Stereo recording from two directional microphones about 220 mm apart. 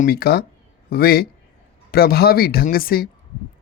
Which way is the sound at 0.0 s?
45° left (ahead or behind).